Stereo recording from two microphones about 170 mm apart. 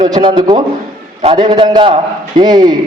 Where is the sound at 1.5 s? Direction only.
25° right (ahead or behind).